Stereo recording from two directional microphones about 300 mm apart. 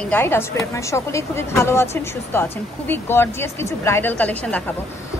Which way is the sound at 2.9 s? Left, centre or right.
Centre.